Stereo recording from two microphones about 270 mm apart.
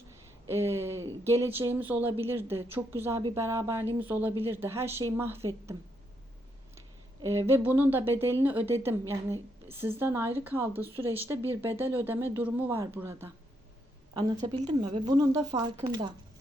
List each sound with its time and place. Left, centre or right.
0.4 s a woman's voice: centre